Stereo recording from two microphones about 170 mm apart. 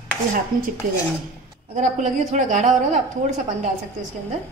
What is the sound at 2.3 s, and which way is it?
Speech, 45° right (ahead or behind).